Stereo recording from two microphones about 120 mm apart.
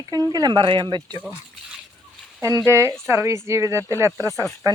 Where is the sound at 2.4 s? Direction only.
25° right (ahead or behind).